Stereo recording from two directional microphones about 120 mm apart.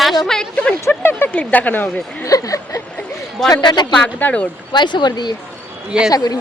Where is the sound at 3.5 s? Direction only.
35° left (ahead or behind).